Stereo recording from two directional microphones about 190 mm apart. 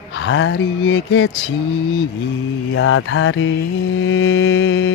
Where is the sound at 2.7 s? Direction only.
90° left.